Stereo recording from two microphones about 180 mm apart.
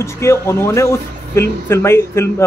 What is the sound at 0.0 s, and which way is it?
Speech, 15° left (ahead or behind).